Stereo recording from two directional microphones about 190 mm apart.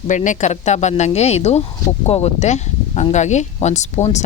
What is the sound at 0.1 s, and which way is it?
Speech, 40° left (ahead or behind).